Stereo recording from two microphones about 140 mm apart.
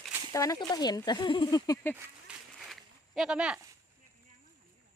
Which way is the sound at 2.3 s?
10° right (ahead or behind).